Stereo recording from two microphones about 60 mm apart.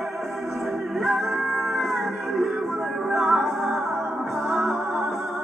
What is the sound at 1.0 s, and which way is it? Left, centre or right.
Music, centre.